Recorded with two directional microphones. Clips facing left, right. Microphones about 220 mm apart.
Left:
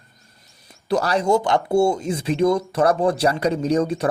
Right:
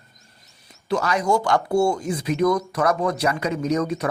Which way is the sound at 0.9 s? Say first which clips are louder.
Left 2 dB; 35° left (ahead or behind).